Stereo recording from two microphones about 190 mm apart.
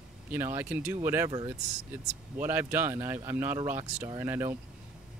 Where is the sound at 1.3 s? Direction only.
20° right (ahead or behind).